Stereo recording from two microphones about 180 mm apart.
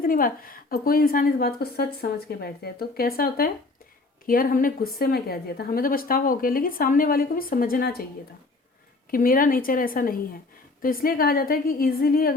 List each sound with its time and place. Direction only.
0.0 s a woman's voice: 50° left (ahead or behind)
9.0 s a woman's voice: 50° left (ahead or behind)